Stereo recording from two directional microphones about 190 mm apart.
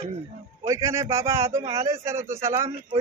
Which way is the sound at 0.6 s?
15° right (ahead or behind).